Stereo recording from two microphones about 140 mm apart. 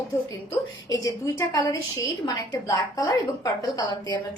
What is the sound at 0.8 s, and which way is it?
A woman's voice, 25° left (ahead or behind).